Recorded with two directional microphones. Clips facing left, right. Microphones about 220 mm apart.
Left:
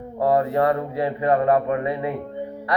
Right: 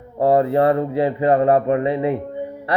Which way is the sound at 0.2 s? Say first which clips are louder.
Right 4 dB; 25° right (ahead or behind).